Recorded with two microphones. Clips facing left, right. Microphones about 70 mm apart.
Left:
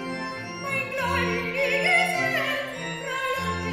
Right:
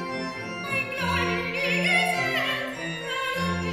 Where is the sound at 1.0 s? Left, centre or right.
Centre.